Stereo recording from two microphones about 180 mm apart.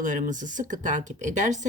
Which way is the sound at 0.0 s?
45° right (ahead or behind).